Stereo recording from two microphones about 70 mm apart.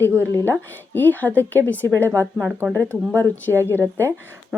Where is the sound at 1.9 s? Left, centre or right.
Right.